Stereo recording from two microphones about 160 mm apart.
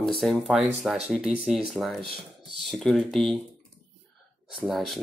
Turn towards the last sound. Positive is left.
turn(degrees=0)  # may be behind; listen again after turning